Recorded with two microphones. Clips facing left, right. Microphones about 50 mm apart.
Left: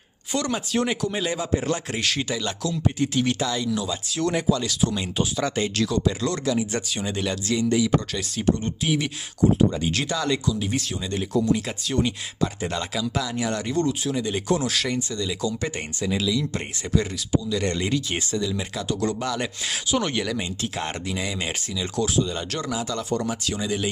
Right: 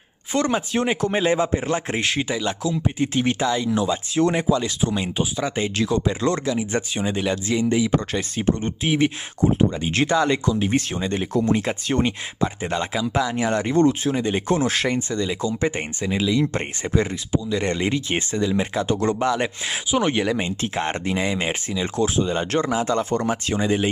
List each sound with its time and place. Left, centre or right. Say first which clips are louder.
0.3 s speech: right 4 dB; right